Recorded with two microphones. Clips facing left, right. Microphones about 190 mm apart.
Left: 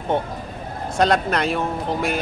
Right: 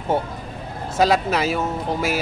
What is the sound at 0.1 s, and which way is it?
Speech, 5° right (ahead or behind).